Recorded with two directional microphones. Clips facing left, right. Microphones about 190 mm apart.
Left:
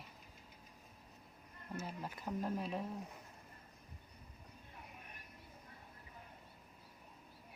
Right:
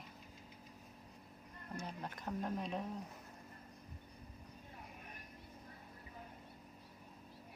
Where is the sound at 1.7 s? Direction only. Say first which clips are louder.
Left 1 dB; 5° left (ahead or behind).